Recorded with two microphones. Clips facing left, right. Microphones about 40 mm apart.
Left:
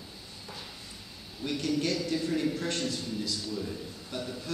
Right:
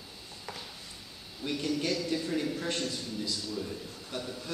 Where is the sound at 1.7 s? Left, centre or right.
Centre.